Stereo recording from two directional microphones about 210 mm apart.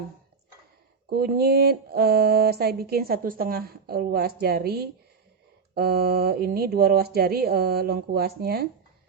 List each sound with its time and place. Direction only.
1.1 s speech: 50° right (ahead or behind)